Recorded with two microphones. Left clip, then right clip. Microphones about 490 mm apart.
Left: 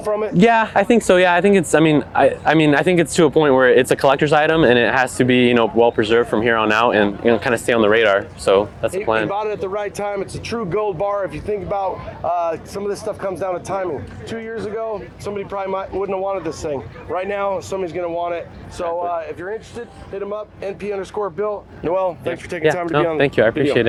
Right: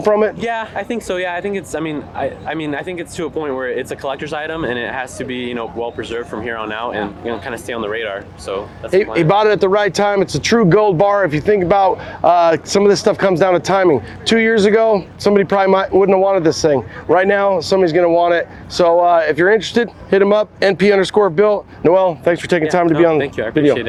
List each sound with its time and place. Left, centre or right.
0.3 s speech: left
9.3 s speech: right
18.8 s speech: right
20.6 s speech: right
23.1 s speech: left